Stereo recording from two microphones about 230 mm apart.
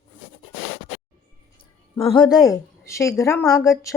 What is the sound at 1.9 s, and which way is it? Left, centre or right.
Speech, left.